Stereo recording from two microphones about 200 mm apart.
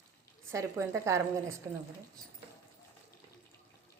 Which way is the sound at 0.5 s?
15° right (ahead or behind).